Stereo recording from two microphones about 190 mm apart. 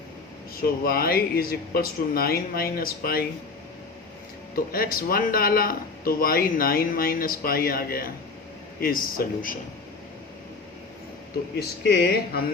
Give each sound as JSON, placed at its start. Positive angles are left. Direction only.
{"t": 0.6, "sound": "speech", "side_deg": 50}
{"t": 4.5, "sound": "speech", "side_deg": 50}
{"t": 11.8, "sound": "speech", "side_deg": 55}